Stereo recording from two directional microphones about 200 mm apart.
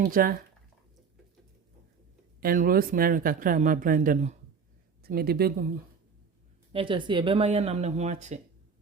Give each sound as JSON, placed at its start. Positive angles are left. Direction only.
{"t": 0.0, "sound": "speech", "side_deg": -45}
{"t": 2.4, "sound": "speech", "side_deg": -45}
{"t": 5.0, "sound": "speech", "side_deg": -50}
{"t": 6.7, "sound": "speech", "side_deg": -25}